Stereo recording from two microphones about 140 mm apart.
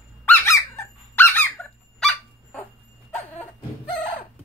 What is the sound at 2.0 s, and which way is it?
Dog, 5° left (ahead or behind).